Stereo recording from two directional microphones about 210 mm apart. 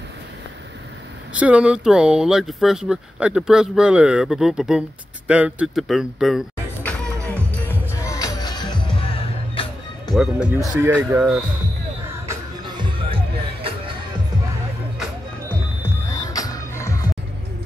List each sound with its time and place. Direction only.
1.3 s speech: 5° right (ahead or behind)
7.6 s music: 15° left (ahead or behind)
10.1 s speech: 5° right (ahead or behind)
12.3 s music: 25° right (ahead or behind)
16.3 s music: 15° left (ahead or behind)